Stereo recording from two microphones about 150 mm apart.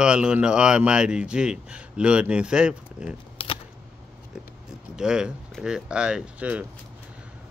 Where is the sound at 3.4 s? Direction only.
40° left (ahead or behind).